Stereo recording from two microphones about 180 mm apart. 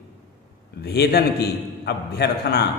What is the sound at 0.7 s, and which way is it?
A man's voice, 65° left (ahead or behind).